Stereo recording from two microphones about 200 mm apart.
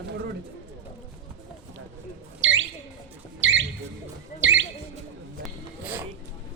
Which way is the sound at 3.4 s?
70° right (ahead or behind).